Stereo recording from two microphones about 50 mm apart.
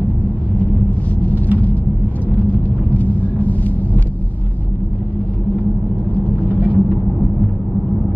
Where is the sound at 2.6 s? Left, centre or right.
Left.